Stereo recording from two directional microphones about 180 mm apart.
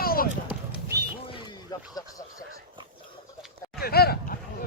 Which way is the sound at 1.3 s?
25° left (ahead or behind).